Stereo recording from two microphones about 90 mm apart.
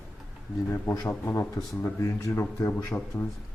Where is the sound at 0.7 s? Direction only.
35° left (ahead or behind).